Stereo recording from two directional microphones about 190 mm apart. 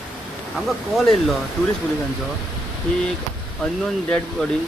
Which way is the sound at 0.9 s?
Centre (ahead or behind).